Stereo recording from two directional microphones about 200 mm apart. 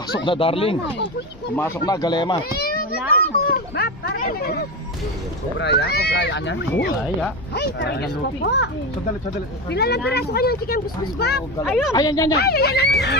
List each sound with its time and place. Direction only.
0.3 s speech: 25° left (ahead or behind)
1.5 s speech: 15° left (ahead or behind)
3.4 s speech: 50° left (ahead or behind)
5.5 s speech: 60° left (ahead or behind)
11.6 s speech: centre (ahead or behind)
11.9 s speech: 20° left (ahead or behind)
12.4 s speech: 50° left (ahead or behind)